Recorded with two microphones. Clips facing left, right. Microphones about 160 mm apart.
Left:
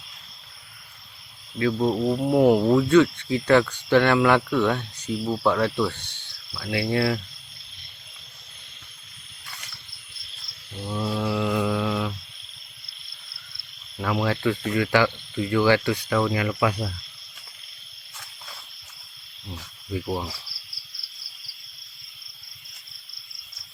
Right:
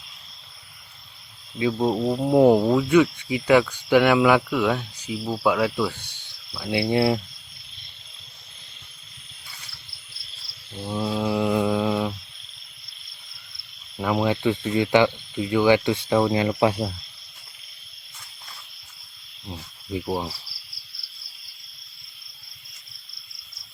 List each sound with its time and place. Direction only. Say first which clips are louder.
1.5 s speech: even; 15° right (ahead or behind)
2.6 s speech: left 1 dB; 10° right (ahead or behind)
9.5 s a sound: left 4 dB; 85° left
10.8 s mantra: right 2 dB; 20° right (ahead or behind)
14.0 s speech: right 2 dB; 20° right (ahead or behind)
19.9 s speech: right 1 dB; 20° right (ahead or behind)